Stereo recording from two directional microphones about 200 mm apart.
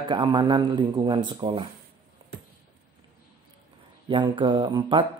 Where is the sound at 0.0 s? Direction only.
20° right (ahead or behind).